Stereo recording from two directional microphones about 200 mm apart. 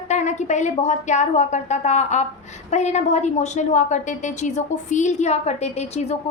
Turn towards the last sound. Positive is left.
turn(degrees=35)  # may be behind; listen again after turning